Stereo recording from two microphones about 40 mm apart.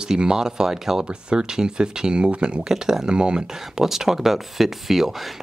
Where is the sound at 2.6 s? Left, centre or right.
Centre.